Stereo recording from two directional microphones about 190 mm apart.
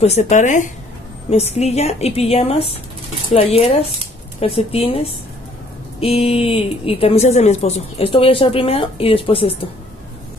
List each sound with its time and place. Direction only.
0.0 s a woman's voice: 35° left (ahead or behind)